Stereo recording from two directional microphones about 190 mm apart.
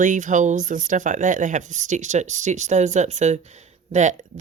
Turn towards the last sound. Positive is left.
turn(degrees=-40)  # may be behind; listen again after turning